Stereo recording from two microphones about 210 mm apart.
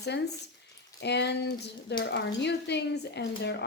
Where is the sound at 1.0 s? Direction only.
55° left (ahead or behind).